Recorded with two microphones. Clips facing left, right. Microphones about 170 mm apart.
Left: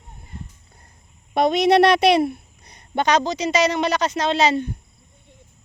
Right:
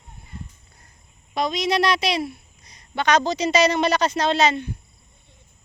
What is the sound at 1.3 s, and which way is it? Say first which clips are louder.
A woman's voice: left 7 dB; 60° left (ahead or behind).